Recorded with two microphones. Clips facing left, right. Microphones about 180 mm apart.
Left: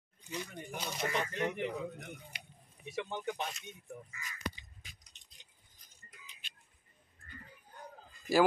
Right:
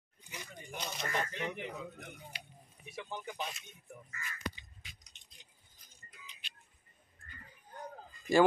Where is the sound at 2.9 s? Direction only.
75° left (ahead or behind).